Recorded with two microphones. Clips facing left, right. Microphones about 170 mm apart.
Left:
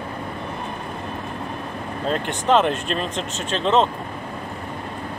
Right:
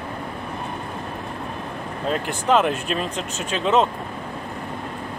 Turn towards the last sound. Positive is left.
turn(degrees=-5)  # may be behind; listen again after turning